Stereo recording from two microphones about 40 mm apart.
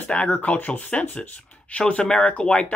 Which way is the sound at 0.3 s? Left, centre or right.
Left.